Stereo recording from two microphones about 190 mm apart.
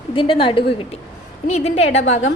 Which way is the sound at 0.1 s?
25° left (ahead or behind).